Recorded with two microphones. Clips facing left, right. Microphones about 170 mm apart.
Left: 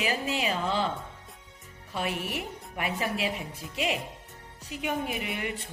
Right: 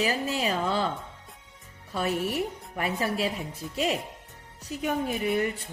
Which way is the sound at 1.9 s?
35° right (ahead or behind).